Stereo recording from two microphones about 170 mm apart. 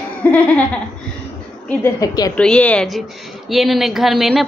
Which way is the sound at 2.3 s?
5° left (ahead or behind).